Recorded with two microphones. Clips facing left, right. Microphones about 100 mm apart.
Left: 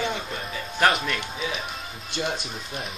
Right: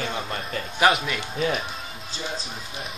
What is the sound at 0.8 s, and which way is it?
Speech, 5° right (ahead or behind).